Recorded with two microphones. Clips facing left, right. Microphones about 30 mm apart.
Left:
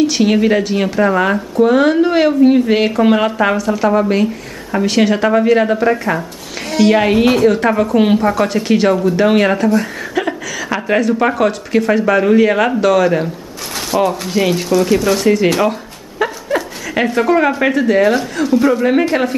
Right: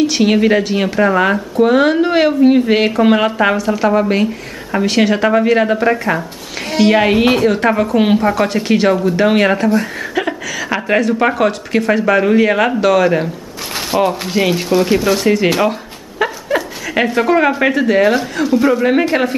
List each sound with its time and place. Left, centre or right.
0.0 s speech: centre
15.0 s speech: centre